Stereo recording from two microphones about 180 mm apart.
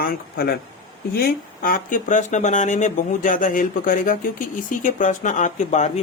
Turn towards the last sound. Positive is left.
turn(degrees=40)  # may be behind; listen again after turning